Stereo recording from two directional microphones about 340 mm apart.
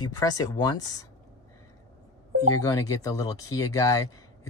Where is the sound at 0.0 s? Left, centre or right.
Centre.